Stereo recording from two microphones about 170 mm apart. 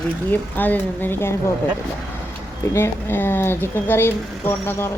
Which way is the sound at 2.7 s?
15° left (ahead or behind).